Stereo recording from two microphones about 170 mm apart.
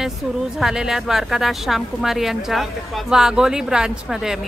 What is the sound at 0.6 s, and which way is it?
A woman's voice, 5° right (ahead or behind).